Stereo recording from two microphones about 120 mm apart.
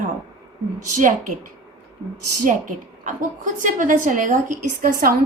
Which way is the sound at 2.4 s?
90° right.